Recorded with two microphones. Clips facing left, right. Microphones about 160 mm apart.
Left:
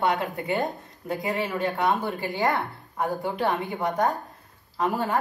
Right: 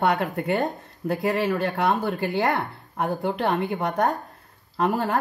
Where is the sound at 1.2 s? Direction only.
75° right (ahead or behind).